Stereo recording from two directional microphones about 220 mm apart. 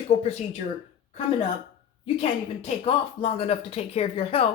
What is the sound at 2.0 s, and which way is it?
Speech, 30° left (ahead or behind).